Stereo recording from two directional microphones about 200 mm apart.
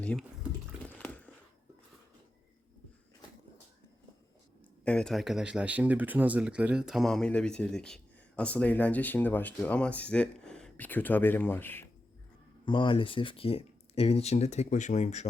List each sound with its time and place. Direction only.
0.0 s speech: 5° left (ahead or behind)
0.9 s biting: 5° left (ahead or behind)
4.9 s speech: 5° left (ahead or behind)
12.6 s speech: 25° left (ahead or behind)